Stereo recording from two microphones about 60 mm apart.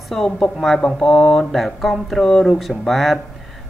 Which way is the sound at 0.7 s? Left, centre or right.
Centre.